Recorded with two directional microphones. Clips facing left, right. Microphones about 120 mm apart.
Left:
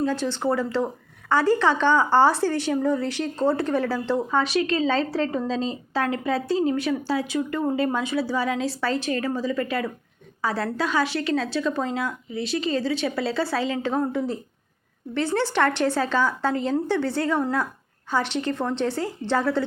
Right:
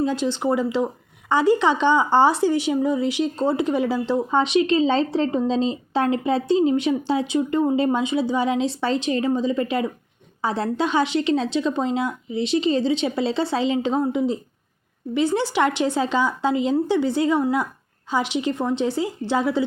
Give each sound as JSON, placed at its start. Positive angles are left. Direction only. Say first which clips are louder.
{"t": 0.0, "sound": "a woman's voice", "louder": "right 2 dB", "side_deg": -15}